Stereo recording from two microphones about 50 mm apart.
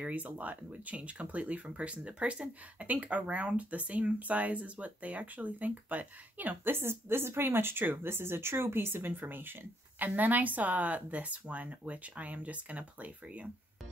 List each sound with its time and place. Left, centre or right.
0.0 s speech: right